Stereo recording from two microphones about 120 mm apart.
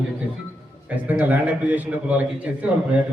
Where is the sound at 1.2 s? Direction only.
15° right (ahead or behind).